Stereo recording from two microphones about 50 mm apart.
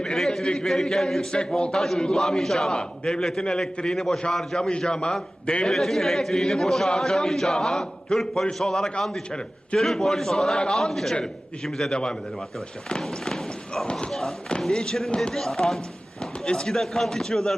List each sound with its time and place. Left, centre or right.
0.0 s a man's voice: centre
13.8 s speech: centre
14.1 s a man's voice: centre